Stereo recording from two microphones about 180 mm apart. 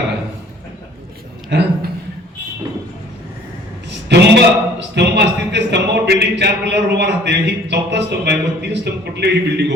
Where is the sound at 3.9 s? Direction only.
70° right (ahead or behind).